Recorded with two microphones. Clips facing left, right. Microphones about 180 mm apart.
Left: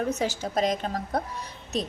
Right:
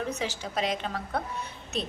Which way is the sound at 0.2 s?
45° left (ahead or behind).